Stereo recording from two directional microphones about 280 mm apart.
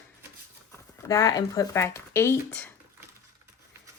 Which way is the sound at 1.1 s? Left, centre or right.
Centre.